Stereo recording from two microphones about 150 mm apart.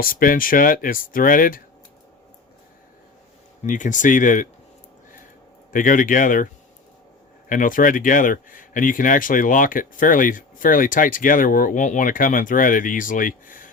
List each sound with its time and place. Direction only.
0.0 s speech: 70° left (ahead or behind)
3.6 s speech: 55° left (ahead or behind)
5.7 s speech: 65° left (ahead or behind)
7.5 s speech: 65° left (ahead or behind)